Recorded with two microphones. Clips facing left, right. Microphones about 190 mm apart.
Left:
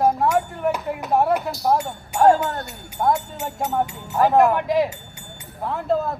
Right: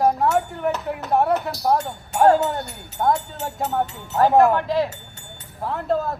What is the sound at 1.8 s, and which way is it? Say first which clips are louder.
Speech: left 1 dB; 10° left (ahead or behind).